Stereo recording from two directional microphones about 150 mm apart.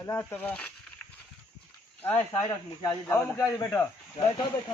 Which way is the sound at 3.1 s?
15° left (ahead or behind).